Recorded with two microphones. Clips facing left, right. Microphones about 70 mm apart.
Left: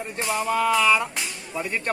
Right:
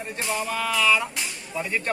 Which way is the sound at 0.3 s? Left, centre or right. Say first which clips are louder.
Left 5 dB; left.